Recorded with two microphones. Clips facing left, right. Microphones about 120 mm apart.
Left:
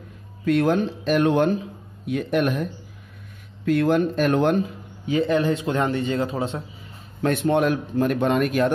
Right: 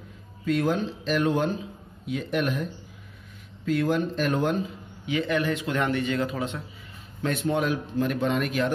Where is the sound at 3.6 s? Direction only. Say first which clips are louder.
Left 5 dB; 60° left (ahead or behind).